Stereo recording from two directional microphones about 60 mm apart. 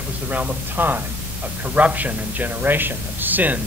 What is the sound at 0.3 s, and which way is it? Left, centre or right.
Speech, right.